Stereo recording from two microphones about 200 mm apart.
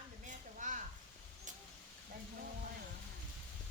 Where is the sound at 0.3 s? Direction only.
40° right (ahead or behind).